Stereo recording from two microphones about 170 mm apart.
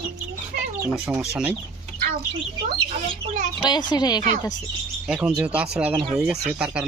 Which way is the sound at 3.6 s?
25° left (ahead or behind).